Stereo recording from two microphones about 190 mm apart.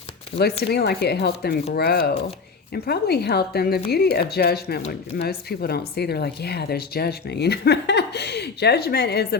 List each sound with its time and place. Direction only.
0.7 s speech: 60° left (ahead or behind)